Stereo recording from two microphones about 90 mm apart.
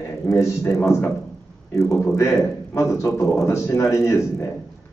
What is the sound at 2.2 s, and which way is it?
A man's voice, 30° left (ahead or behind).